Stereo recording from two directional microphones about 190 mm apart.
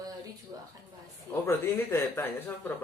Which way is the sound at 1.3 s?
15° left (ahead or behind).